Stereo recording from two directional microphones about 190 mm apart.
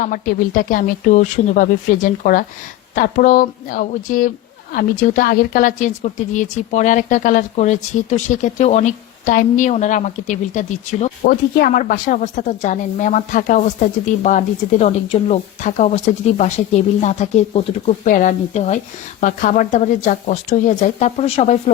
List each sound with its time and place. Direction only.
0.0 s a woman's voice: 45° left (ahead or behind)